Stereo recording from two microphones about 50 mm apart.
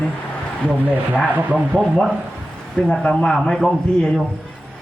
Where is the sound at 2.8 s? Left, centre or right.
Left.